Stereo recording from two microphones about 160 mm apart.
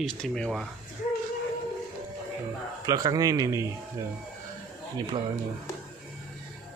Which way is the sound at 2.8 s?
25° right (ahead or behind).